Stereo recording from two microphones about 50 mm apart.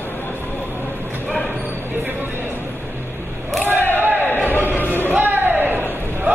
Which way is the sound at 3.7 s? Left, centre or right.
Left.